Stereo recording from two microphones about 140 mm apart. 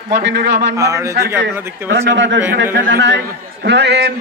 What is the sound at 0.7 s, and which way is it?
Speech, 20° right (ahead or behind).